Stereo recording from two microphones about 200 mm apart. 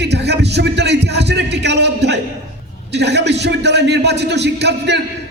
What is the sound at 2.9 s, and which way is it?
A man's voice, 55° right (ahead or behind).